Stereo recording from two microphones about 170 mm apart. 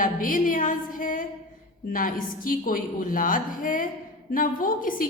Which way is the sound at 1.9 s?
55° left (ahead or behind).